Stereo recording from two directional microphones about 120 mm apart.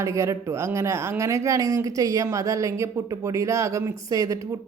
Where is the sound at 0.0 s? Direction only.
25° right (ahead or behind).